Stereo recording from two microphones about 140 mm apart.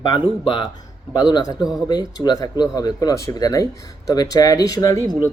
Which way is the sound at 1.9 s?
30° left (ahead or behind).